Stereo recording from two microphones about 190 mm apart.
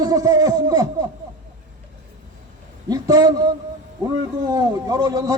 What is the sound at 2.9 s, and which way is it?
A man's voice, 20° right (ahead or behind).